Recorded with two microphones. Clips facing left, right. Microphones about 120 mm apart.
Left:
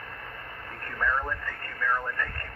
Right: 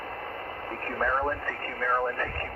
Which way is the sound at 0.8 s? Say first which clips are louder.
Right 2 dB; 40° right (ahead or behind).